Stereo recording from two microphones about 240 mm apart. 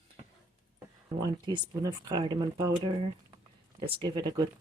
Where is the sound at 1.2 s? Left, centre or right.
Centre.